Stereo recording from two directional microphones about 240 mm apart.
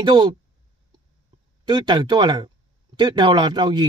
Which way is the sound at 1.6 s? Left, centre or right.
Centre.